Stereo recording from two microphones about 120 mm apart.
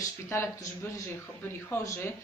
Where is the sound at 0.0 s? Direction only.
25° left (ahead or behind).